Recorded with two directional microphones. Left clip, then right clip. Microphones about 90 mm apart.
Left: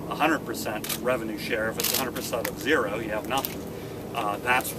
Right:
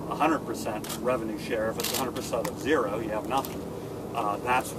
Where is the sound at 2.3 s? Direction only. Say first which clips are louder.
Left 2 dB; 5° left (ahead or behind).